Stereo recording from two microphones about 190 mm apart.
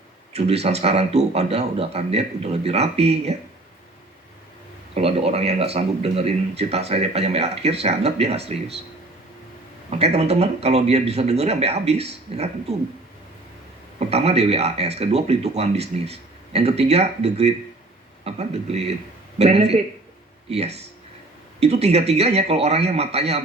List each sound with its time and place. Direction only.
0.3 s speech: 35° right (ahead or behind)
4.9 s speech: 30° right (ahead or behind)
9.9 s speech: 35° right (ahead or behind)
14.1 s speech: 35° right (ahead or behind)